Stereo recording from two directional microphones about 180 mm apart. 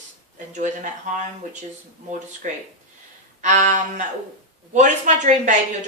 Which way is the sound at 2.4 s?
45° right (ahead or behind).